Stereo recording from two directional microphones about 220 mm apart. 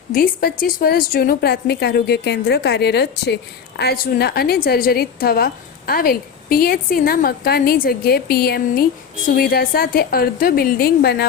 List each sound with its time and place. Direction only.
0.1 s a woman's voice: 40° left (ahead or behind)